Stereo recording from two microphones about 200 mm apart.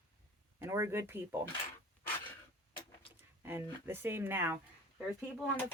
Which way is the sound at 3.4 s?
10° right (ahead or behind).